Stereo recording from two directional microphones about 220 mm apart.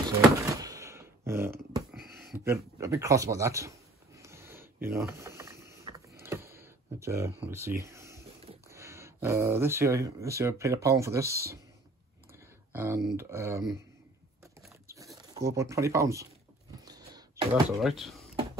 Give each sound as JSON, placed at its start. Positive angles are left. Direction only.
{"t": 0.4, "sound": "a sound", "side_deg": -15}
{"t": 5.9, "sound": "mechanisms", "side_deg": -15}
{"t": 8.6, "sound": "speech", "side_deg": -10}
{"t": 12.7, "sound": "speech", "side_deg": -10}
{"t": 15.3, "sound": "speech", "side_deg": -15}
{"t": 16.8, "sound": "a sound", "side_deg": -20}
{"t": 17.6, "sound": "speech", "side_deg": 0}